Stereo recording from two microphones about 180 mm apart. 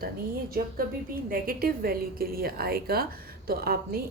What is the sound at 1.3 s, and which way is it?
A woman's voice, 55° right (ahead or behind).